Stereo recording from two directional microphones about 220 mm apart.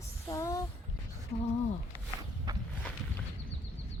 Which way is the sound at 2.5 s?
20° right (ahead or behind).